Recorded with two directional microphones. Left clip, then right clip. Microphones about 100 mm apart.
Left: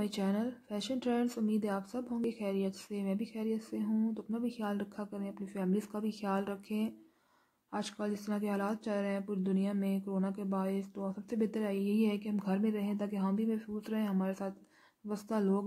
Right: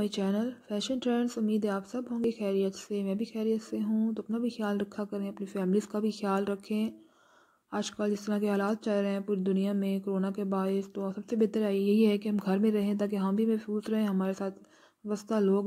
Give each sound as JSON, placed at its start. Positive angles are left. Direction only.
{"t": 0.0, "sound": "speech", "side_deg": -25}